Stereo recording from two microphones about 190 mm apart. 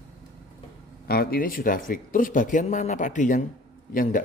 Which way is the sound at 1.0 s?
50° left (ahead or behind).